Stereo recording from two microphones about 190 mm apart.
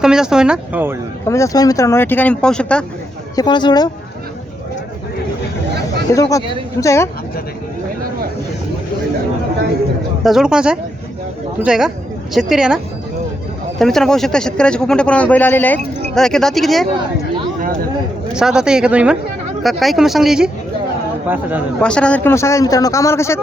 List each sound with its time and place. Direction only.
0.0 s speech: 5° right (ahead or behind)
1.3 s a man's voice: 15° left (ahead or behind)
3.3 s speech: 25° left (ahead or behind)
6.1 s a man's voice: 15° left (ahead or behind)
10.2 s speech: 5° right (ahead or behind)
17.6 s a sound: 50° right (ahead or behind)
18.3 s speech: 5° right (ahead or behind)
21.8 s a man's voice: 5° left (ahead or behind)